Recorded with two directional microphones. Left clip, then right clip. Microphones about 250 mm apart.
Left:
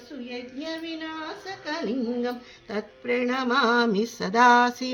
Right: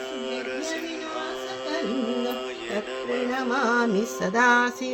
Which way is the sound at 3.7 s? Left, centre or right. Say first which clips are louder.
Even; right.